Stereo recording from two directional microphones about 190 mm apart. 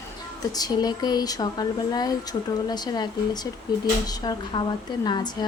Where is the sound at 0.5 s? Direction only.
20° left (ahead or behind).